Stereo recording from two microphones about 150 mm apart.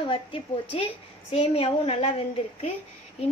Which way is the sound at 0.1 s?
35° left (ahead or behind).